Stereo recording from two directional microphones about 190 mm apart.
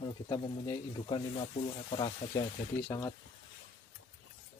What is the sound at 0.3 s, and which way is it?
Speech, 25° left (ahead or behind).